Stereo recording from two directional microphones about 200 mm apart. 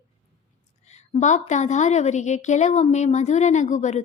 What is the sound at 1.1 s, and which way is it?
Speech, 35° left (ahead or behind).